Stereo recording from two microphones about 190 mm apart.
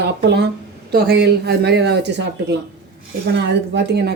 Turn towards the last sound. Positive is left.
turn(degrees=-60)  # may be behind; listen again after turning